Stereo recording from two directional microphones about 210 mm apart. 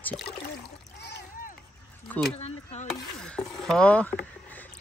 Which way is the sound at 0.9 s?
55° left (ahead or behind).